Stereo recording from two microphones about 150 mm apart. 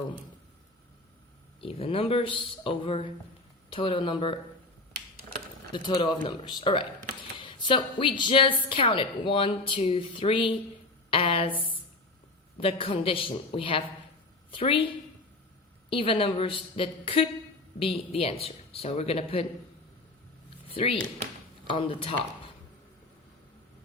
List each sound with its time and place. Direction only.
1.6 s a woman's voice: 40° left (ahead or behind)
5.7 s a woman's voice: 30° left (ahead or behind)
7.3 s a sound: 35° left (ahead or behind)
8.2 s a woman's voice: 35° left (ahead or behind)
12.5 s a woman's voice: 35° left (ahead or behind)
15.9 s a woman's voice: 35° left (ahead or behind)
20.7 s a woman's voice: 40° left (ahead or behind)